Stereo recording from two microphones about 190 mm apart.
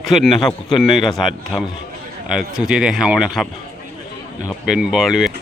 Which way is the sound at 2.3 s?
5° right (ahead or behind).